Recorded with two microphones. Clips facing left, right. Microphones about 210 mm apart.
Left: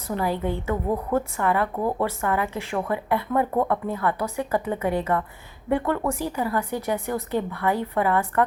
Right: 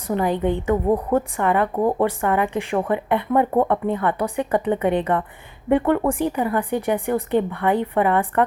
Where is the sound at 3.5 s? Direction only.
35° right (ahead or behind).